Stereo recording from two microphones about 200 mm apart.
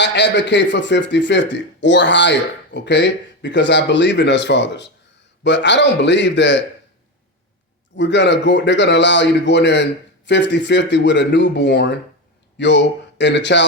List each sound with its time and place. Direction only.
0.0 s a man's voice: 60° left (ahead or behind)
7.9 s a man's voice: 60° left (ahead or behind)